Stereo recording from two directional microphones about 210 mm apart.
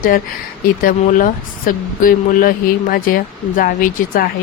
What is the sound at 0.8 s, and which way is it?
Speech, 40° left (ahead or behind).